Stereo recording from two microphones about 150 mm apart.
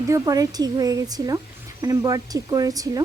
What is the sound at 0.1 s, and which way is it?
Speech, 25° right (ahead or behind).